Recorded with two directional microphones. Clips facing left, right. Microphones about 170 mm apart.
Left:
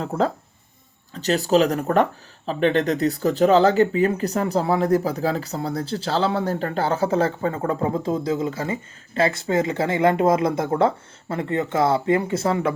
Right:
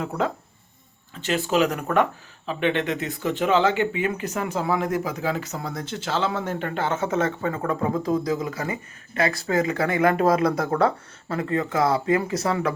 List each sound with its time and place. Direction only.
0.0 s speech: 35° left (ahead or behind)